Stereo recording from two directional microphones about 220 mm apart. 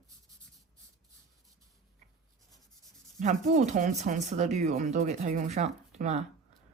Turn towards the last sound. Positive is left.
turn(degrees=-30)  # may be behind; listen again after turning